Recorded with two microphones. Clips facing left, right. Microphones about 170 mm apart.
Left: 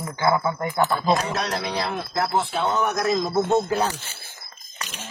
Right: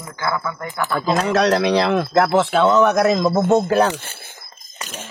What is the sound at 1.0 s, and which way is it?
Speech, 90° right.